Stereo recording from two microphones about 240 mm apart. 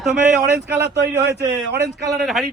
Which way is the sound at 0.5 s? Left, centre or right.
Right.